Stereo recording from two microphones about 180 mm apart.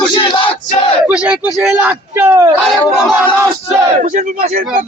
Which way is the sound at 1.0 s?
5° right (ahead or behind).